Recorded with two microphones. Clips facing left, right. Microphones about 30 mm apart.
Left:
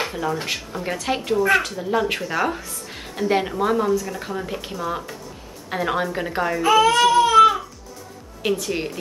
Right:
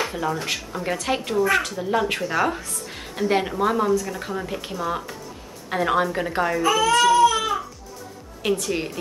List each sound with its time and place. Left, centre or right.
0.1 s speech: centre
1.8 s speech: centre
6.6 s speech: left
7.1 s a sound: left
8.4 s speech: centre